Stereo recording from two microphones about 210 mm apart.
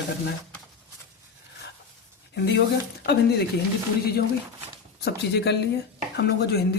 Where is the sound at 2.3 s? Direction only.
55° left (ahead or behind).